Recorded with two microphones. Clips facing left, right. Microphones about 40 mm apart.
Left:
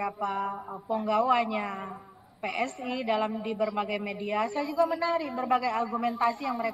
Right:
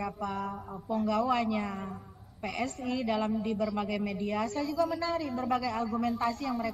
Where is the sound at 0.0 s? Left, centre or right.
Centre.